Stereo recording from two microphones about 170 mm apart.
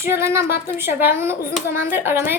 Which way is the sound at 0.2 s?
15° right (ahead or behind).